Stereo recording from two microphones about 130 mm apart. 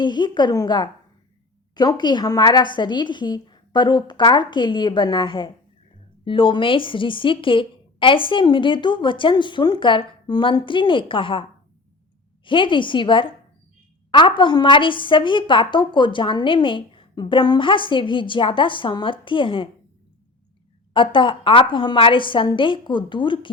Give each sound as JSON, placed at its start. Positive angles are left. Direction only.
{"t": 0.0, "sound": "a woman's voice", "side_deg": 35}
{"t": 12.5, "sound": "a woman's voice", "side_deg": 40}
{"t": 20.9, "sound": "a woman's voice", "side_deg": 40}